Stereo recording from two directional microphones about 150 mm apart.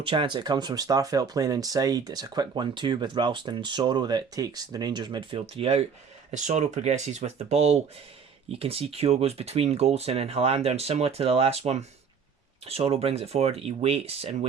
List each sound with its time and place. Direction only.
0.0 s speech: 35° right (ahead or behind)
6.3 s speech: 55° right (ahead or behind)